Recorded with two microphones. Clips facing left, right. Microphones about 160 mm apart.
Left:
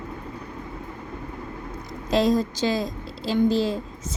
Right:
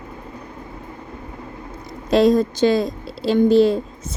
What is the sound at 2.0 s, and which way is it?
A woman's voice, 65° right (ahead or behind).